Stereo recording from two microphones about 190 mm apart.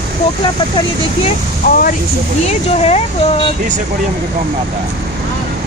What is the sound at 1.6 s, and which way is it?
Speech, 45° left (ahead or behind).